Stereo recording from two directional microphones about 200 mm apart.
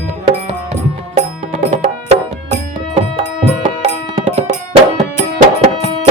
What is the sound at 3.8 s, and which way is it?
Music, 30° right (ahead or behind).